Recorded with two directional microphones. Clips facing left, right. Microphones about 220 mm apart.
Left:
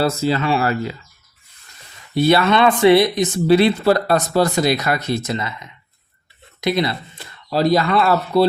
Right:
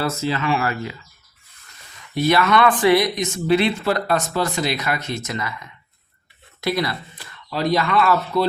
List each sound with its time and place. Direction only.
0.0 s speech: 35° left (ahead or behind)
2.1 s speech: 30° left (ahead or behind)